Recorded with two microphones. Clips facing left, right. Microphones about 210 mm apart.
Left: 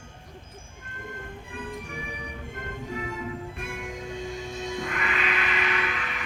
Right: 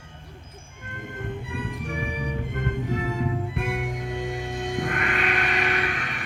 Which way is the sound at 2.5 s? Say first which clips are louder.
Right 5 dB; 65° right (ahead or behind).